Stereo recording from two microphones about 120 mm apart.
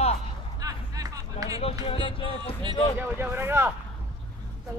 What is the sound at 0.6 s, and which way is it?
Speech, 30° right (ahead or behind).